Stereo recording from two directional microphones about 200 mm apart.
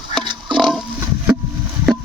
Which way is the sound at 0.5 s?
Centre (ahead or behind).